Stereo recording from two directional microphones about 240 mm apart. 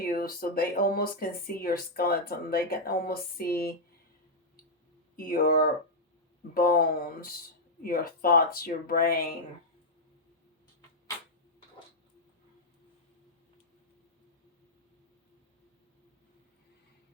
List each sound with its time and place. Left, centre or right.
0.0 s speech: left
5.1 s speech: left